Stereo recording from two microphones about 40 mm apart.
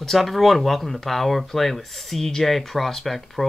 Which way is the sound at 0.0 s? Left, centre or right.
Centre.